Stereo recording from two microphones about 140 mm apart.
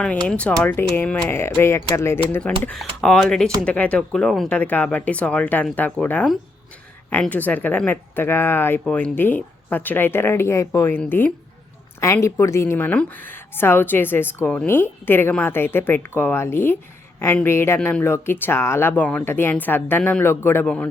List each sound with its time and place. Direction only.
0.3 s a woman's voice: 10° left (ahead or behind)